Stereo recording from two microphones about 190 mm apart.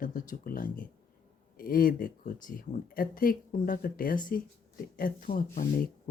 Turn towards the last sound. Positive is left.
turn(degrees=50)  # may be behind; listen again after turning